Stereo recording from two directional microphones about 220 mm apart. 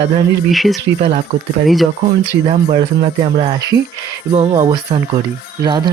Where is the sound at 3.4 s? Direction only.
15° right (ahead or behind).